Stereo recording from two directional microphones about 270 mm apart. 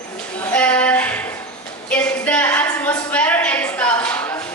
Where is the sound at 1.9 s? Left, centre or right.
Centre.